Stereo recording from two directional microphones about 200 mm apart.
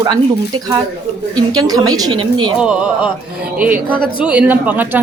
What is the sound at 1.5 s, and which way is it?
A woman's voice, 20° right (ahead or behind).